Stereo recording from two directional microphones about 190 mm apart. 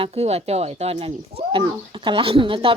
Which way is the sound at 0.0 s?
35° right (ahead or behind).